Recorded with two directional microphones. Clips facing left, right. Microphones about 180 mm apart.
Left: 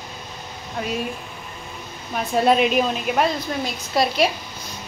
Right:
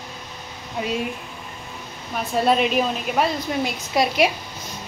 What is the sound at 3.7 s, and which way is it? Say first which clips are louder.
Speech: left 3 dB; 15° right (ahead or behind).